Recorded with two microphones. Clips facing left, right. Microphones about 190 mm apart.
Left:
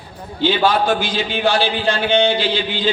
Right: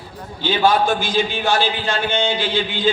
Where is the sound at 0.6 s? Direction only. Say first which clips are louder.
Right 3 dB; 50° right (ahead or behind).